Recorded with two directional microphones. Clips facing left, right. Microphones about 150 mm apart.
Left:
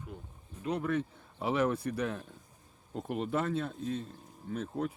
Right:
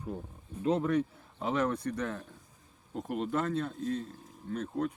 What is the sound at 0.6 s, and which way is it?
Speech, 25° right (ahead or behind).